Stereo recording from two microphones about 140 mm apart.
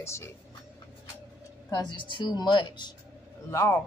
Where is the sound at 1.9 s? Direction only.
35° left (ahead or behind).